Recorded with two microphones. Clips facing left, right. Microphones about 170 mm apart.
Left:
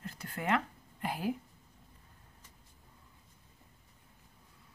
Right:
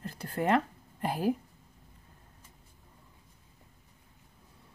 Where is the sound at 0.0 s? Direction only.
35° right (ahead or behind).